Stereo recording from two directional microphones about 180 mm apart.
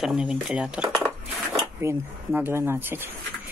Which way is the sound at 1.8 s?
15° right (ahead or behind).